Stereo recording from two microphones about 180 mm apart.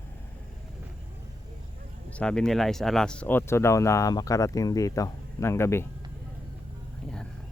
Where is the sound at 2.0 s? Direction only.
5° left (ahead or behind).